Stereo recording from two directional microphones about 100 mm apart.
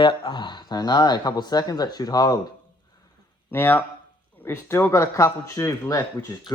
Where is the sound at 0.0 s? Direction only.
55° left (ahead or behind).